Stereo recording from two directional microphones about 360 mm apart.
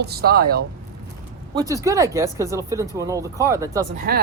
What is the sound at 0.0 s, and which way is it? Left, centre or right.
Speech, right.